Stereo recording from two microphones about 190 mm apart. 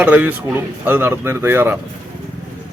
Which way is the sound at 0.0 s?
10° right (ahead or behind).